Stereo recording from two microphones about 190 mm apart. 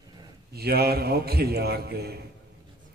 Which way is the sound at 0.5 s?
55° right (ahead or behind).